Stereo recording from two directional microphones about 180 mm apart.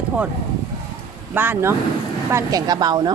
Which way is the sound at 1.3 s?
10° right (ahead or behind).